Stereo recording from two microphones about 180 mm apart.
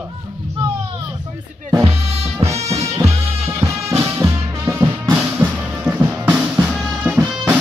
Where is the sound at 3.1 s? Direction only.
35° right (ahead or behind).